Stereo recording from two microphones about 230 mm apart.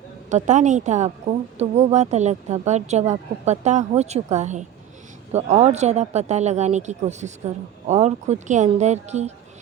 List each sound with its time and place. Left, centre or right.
0.3 s a woman's voice: right